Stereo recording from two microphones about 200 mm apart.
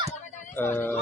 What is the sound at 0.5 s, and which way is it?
Speech, 10° left (ahead or behind).